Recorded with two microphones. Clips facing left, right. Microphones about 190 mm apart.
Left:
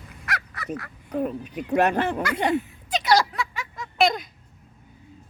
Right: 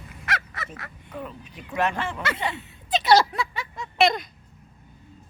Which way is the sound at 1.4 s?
60° left (ahead or behind).